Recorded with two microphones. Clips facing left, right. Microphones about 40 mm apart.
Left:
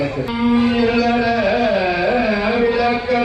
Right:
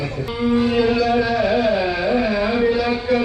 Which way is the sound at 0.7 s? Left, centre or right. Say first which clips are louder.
Left 1 dB; centre.